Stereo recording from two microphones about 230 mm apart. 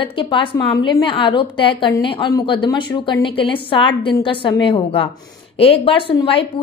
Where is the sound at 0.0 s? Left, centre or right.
Left.